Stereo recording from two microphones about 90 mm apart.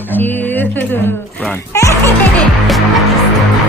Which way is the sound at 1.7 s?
35° left (ahead or behind).